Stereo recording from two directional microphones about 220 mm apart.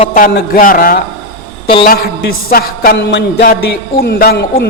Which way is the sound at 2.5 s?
45° left (ahead or behind).